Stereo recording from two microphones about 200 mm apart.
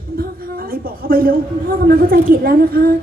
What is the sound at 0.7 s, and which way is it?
Speech, 45° right (ahead or behind).